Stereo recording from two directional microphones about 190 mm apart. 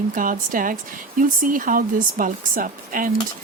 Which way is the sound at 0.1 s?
45° right (ahead or behind).